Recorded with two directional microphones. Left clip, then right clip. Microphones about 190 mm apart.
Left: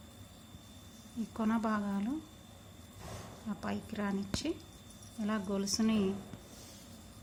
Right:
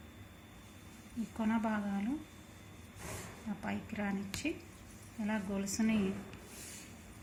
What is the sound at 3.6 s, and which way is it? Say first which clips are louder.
Speech: left 1 dB; 35° left (ahead or behind).